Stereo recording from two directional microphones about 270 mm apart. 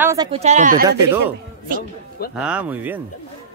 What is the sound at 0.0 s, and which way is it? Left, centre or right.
Speech, centre.